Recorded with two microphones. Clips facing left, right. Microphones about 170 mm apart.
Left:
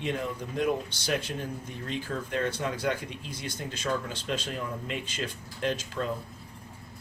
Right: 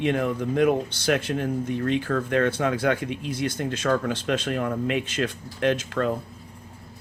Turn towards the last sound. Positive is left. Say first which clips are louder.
# right 7 dB
turn(degrees=-70)  # may be behind; listen again after turning